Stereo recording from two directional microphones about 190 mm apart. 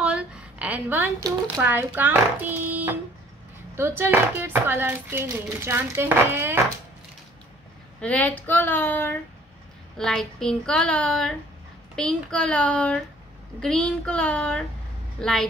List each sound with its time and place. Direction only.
0.0 s speech: 5° right (ahead or behind)
8.0 s speech: 5° left (ahead or behind)
9.9 s child singing: centre (ahead or behind)